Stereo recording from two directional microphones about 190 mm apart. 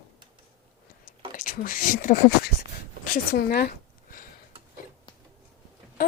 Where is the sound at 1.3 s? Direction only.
45° left (ahead or behind).